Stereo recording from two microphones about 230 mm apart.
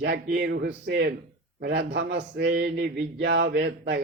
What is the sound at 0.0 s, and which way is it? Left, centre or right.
A man's voice, right.